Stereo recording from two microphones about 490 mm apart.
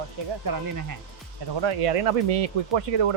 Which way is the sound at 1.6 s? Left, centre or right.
Right.